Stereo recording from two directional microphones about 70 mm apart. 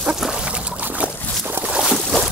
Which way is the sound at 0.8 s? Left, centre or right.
Right.